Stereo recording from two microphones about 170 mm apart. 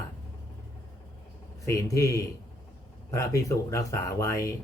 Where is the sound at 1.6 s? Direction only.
20° left (ahead or behind).